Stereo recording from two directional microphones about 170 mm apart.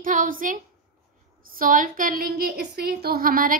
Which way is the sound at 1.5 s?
55° right (ahead or behind).